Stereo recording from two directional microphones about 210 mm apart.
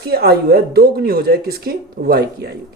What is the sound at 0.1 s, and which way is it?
Speech, 50° right (ahead or behind).